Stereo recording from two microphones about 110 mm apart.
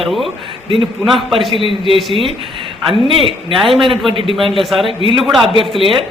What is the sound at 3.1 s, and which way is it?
Speech, 55° right (ahead or behind).